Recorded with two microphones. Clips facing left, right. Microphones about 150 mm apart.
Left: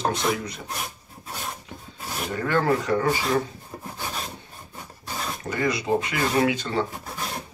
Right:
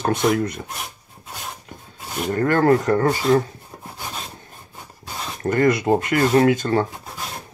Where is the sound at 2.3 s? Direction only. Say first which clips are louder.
Right 6 dB; 50° right (ahead or behind).